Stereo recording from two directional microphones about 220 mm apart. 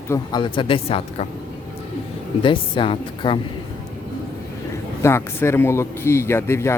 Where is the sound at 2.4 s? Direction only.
25° left (ahead or behind).